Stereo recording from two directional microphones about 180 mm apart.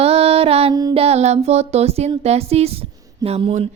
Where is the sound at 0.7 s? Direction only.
20° right (ahead or behind).